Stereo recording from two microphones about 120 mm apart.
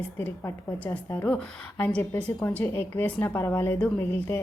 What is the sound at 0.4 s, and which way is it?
Speech, 25° left (ahead or behind).